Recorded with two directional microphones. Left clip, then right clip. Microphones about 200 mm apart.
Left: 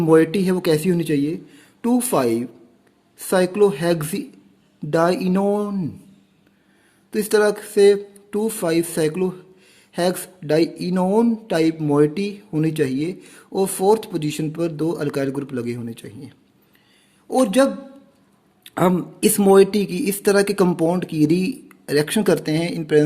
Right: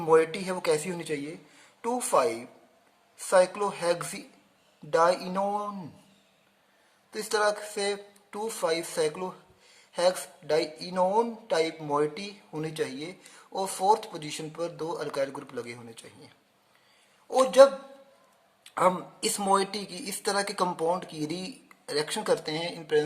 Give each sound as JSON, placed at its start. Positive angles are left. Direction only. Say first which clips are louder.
{"t": 0.0, "sound": "speech", "louder": "left 7 dB", "side_deg": 35}
{"t": 7.1, "sound": "speech", "louder": "left 9 dB", "side_deg": 35}